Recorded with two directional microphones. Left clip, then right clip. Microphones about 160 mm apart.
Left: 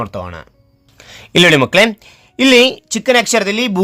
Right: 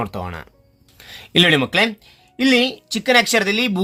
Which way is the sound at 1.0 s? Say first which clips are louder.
Left 5 dB; 30° left (ahead or behind).